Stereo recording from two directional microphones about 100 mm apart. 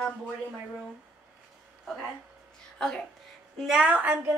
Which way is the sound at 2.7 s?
5° left (ahead or behind).